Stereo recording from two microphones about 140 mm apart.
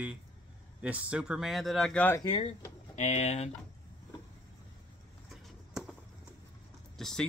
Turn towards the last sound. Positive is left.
turn(degrees=5)  # may be behind; listen again after turning